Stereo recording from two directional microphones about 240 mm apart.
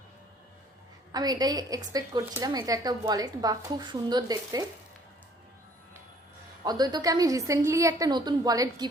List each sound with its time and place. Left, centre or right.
1.1 s a woman's voice: centre
6.7 s a woman's voice: centre